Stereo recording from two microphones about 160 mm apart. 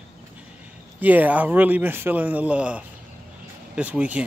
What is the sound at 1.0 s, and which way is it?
A man's voice, 10° right (ahead or behind).